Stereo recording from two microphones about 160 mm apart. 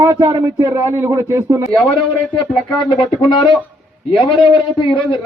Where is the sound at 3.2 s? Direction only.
30° left (ahead or behind).